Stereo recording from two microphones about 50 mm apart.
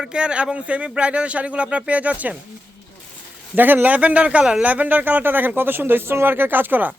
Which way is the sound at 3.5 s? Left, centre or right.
Right.